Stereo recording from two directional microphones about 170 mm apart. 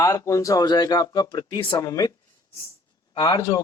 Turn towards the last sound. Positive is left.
turn(degrees=20)  # may be behind; listen again after turning